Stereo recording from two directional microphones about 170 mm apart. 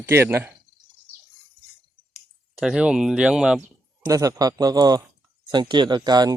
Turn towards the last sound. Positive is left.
turn(degrees=-25)  # may be behind; listen again after turning